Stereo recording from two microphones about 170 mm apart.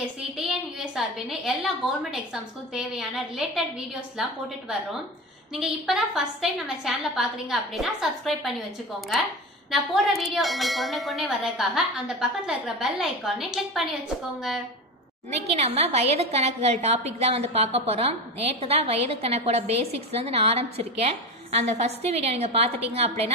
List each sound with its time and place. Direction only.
0.4 s speech: centre (ahead or behind)
5.5 s speech: centre (ahead or behind)
9.7 s speech: centre (ahead or behind)
15.4 s a woman's voice: 40° right (ahead or behind)